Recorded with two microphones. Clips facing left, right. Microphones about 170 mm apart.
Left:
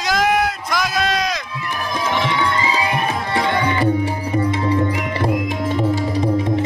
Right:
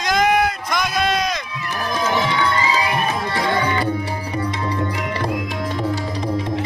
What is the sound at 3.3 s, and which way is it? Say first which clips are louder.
Tabla: left 3 dB; 25° left (ahead or behind).